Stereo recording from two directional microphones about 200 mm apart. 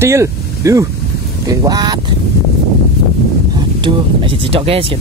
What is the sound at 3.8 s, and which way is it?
Speech, 25° right (ahead or behind).